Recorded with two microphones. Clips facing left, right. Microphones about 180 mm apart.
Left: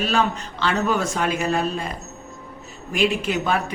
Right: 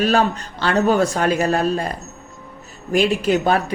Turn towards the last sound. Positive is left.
turn(degrees=-35)  # may be behind; listen again after turning